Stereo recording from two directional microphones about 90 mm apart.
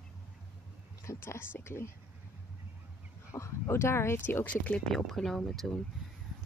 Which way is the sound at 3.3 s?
30° left (ahead or behind).